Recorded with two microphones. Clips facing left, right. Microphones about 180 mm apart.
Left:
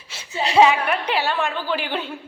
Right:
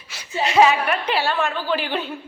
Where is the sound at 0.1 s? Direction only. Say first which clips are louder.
Even; 30° left (ahead or behind).